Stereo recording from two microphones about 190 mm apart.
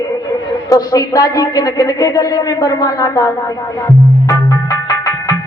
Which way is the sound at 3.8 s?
20° left (ahead or behind).